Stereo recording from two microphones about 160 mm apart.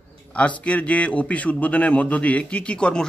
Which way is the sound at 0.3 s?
10° left (ahead or behind).